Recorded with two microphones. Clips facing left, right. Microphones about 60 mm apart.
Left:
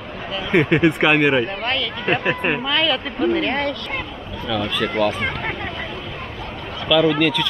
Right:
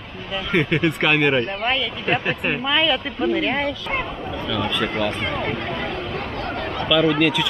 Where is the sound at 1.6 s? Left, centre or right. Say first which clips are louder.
Even; centre.